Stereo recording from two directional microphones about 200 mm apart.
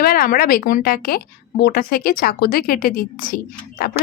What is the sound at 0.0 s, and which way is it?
A woman's voice, 45° left (ahead or behind).